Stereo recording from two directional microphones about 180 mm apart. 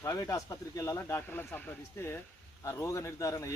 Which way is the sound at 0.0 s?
15° left (ahead or behind).